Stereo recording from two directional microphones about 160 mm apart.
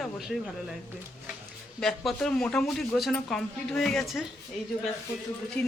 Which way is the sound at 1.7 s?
5° left (ahead or behind).